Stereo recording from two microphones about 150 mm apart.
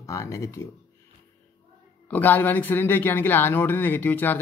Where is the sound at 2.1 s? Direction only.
10° left (ahead or behind).